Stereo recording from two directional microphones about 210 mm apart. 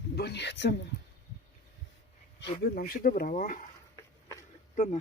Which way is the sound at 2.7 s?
45° left (ahead or behind).